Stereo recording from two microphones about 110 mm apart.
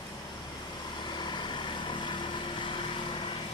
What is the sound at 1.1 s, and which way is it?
Vehicle, 45° left (ahead or behind).